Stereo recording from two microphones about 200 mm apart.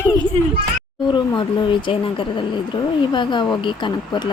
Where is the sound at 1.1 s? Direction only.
25° left (ahead or behind).